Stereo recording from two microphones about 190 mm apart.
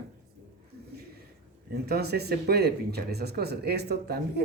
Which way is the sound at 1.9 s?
55° right (ahead or behind).